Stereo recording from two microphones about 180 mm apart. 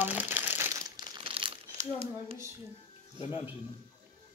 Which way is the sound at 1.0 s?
30° right (ahead or behind).